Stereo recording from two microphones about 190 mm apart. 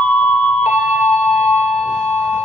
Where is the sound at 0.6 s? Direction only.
35° left (ahead or behind).